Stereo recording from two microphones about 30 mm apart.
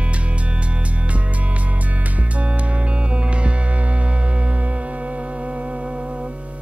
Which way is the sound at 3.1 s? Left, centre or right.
Right.